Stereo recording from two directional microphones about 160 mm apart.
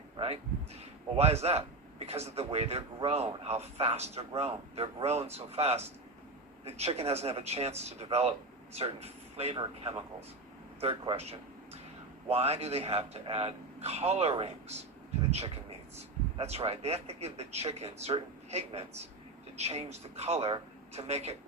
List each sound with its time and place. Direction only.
1.1 s a man's voice: 40° right (ahead or behind)